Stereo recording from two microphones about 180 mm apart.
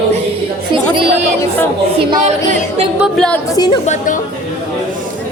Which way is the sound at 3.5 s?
25° left (ahead or behind).